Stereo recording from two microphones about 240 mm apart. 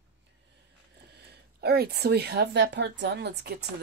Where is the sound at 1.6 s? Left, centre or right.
Right.